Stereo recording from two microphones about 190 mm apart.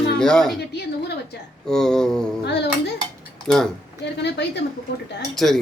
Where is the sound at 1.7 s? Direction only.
5° left (ahead or behind).